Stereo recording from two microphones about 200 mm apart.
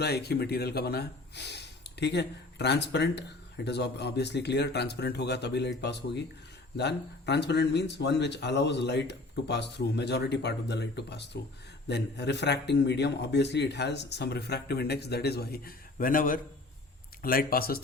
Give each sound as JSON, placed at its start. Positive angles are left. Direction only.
{"t": 0.0, "sound": "speech", "side_deg": 55}